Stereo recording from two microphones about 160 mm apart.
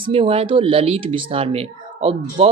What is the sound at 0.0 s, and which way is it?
Speech, 35° right (ahead or behind).